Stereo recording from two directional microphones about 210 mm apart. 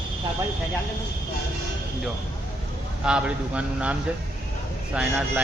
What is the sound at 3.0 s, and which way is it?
A man's voice, 5° right (ahead or behind).